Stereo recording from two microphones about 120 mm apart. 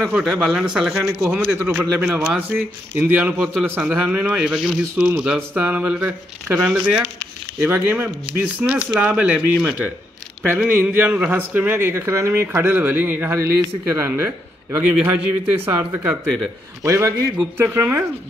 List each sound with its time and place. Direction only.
0.0 s speech: 5° right (ahead or behind)
1.6 s speech: 20° right (ahead or behind)
2.0 s speech: 5° right (ahead or behind)
10.7 s a man's voice: 15° right (ahead or behind)